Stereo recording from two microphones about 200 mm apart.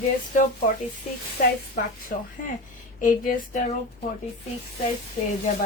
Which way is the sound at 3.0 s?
40° left (ahead or behind).